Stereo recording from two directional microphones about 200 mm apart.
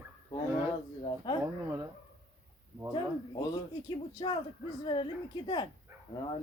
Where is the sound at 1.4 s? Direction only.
15° right (ahead or behind).